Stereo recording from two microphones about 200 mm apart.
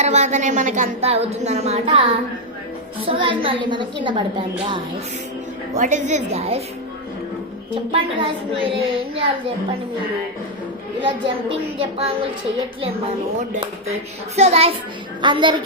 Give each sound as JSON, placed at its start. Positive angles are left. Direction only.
{"t": 0.0, "sound": "a woman's voice", "side_deg": -35}
{"t": 3.1, "sound": "a woman's voice", "side_deg": -25}
{"t": 5.7, "sound": "a woman's voice", "side_deg": -40}
{"t": 7.9, "sound": "a woman's voice", "side_deg": -25}
{"t": 11.0, "sound": "a woman's voice", "side_deg": -25}
{"t": 14.3, "sound": "a woman's voice", "side_deg": -30}